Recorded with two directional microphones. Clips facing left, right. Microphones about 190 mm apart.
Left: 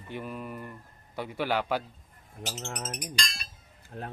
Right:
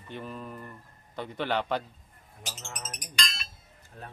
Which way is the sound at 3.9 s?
65° left (ahead or behind).